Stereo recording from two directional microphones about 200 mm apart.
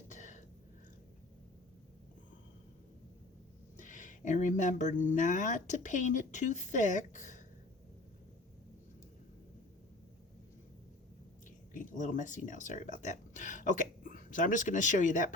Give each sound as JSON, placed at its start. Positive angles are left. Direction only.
{"t": 0.1, "sound": "a sound", "side_deg": 40}
{"t": 3.8, "sound": "speech", "side_deg": 40}
{"t": 11.7, "sound": "speech", "side_deg": 40}